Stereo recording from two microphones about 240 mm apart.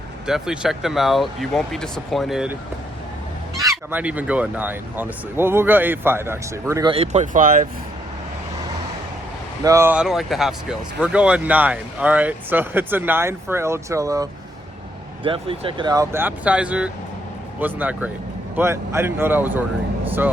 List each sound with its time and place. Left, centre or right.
0.3 s speech: centre
3.7 s speech: centre
6.9 s speech: right
9.6 s speech: centre